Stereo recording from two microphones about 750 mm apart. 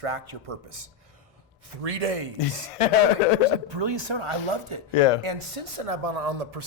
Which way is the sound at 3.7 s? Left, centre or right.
Right.